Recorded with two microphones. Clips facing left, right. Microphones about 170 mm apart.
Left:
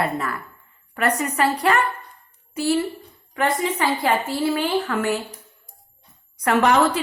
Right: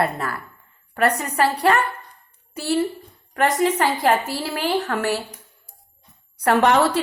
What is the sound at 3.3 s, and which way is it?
A woman's voice, 45° right (ahead or behind).